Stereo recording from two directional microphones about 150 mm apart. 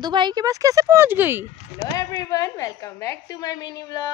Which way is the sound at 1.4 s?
25° left (ahead or behind).